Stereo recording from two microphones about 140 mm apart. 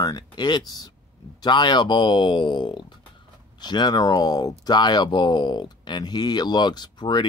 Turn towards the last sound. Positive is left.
turn(degrees=30)  # may be behind; listen again after turning